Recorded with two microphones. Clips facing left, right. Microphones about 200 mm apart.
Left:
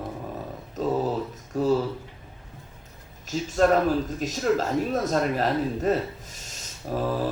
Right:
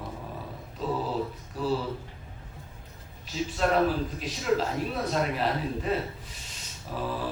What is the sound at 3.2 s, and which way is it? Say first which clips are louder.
Speech: left 6 dB; 45° left (ahead or behind).